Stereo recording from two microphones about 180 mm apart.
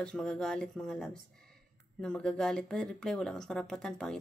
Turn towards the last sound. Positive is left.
turn(degrees=5)  # may be behind; listen again after turning